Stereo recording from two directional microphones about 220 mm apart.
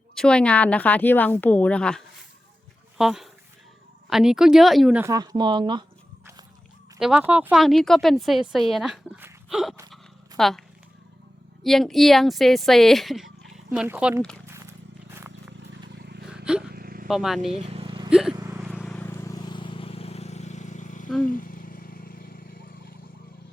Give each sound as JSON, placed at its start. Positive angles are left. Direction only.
{"t": 0.1, "sound": "a woman's voice", "side_deg": 5}
{"t": 3.0, "sound": "a woman's voice", "side_deg": 0}
{"t": 7.0, "sound": "a woman's voice", "side_deg": -5}
{"t": 9.9, "sound": "dog", "side_deg": 0}
{"t": 11.6, "sound": "a woman's voice", "side_deg": 0}
{"t": 14.4, "sound": "wild animals", "side_deg": -15}
{"t": 16.2, "sound": "gasp", "side_deg": -5}
{"t": 16.7, "sound": "vehicle", "side_deg": -45}
{"t": 17.1, "sound": "a woman's voice", "side_deg": 0}
{"t": 17.4, "sound": "vehicle", "side_deg": -30}
{"t": 18.1, "sound": "speech", "side_deg": -5}
{"t": 18.3, "sound": "vehicle", "side_deg": -10}
{"t": 18.8, "sound": "vehicle", "side_deg": 5}
{"t": 21.2, "sound": "insect", "side_deg": 40}